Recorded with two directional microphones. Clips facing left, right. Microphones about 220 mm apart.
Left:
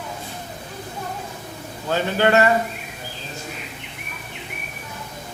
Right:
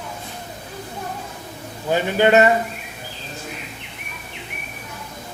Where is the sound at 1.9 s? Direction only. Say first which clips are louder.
Right 3 dB; 20° right (ahead or behind).